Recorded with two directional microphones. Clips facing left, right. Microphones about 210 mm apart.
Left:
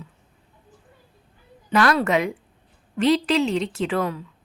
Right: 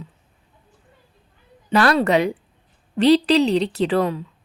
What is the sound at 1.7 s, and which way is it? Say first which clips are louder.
A woman's voice: right 3 dB; 30° right (ahead or behind).